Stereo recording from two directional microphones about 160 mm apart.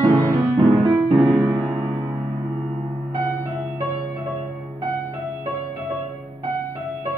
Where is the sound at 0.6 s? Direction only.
25° right (ahead or behind).